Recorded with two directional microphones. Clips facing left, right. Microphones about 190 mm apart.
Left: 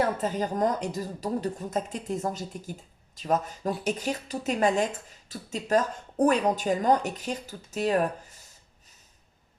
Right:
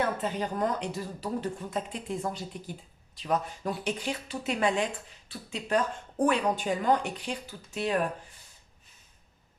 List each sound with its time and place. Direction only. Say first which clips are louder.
0.0 s speech: left 3 dB; 40° left (ahead or behind)